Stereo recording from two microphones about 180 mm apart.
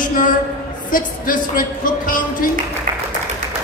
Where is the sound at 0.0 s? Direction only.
50° left (ahead or behind).